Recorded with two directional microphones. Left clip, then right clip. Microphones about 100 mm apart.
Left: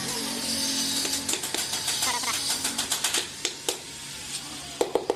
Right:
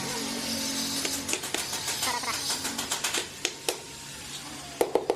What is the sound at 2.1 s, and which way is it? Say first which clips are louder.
Music: even; 5° left (ahead or behind).